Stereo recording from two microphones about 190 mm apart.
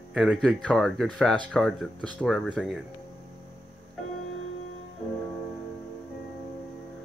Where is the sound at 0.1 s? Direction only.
Centre (ahead or behind).